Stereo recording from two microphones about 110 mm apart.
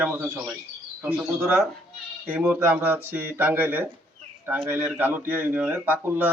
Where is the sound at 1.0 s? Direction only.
20° right (ahead or behind).